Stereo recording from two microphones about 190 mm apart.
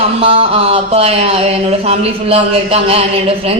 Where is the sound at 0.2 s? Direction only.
30° right (ahead or behind).